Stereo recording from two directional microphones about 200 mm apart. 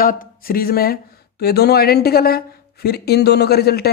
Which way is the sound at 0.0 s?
45° left (ahead or behind).